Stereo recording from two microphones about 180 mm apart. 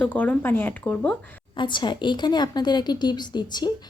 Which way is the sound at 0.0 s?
10° left (ahead or behind).